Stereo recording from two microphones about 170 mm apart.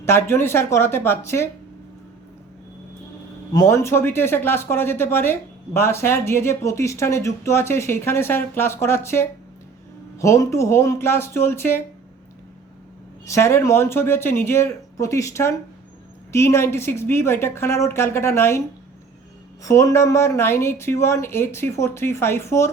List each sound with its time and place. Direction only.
0.0 s speech: 15° left (ahead or behind)
3.5 s speech: 20° left (ahead or behind)
13.2 s speech: 15° left (ahead or behind)
19.6 s speech: 15° left (ahead or behind)